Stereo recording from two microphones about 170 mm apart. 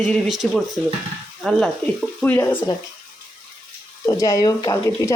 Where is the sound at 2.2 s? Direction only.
10° left (ahead or behind).